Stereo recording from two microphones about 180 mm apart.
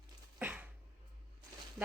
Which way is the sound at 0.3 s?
10° right (ahead or behind).